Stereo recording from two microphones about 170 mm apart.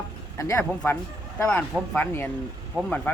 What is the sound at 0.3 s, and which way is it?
Speech, 20° left (ahead or behind).